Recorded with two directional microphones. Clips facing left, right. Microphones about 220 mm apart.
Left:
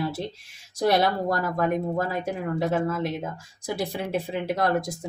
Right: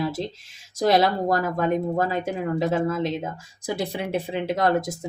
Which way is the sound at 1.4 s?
20° right (ahead or behind).